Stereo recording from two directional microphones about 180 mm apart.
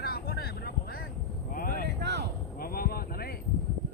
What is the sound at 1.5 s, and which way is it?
Vehicle, 50° left (ahead or behind).